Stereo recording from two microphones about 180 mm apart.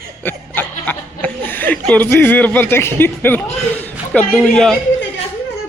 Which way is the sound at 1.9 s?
10° left (ahead or behind).